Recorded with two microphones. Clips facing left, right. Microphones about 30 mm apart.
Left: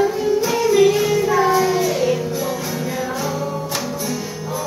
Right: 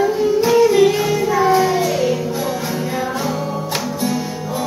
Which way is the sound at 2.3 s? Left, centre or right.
Right.